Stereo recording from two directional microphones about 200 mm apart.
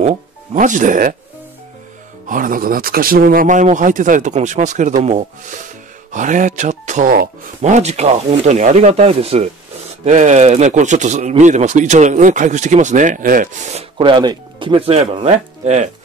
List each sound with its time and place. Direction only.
0.6 s speech: 40° right (ahead or behind)
2.2 s speech: 40° right (ahead or behind)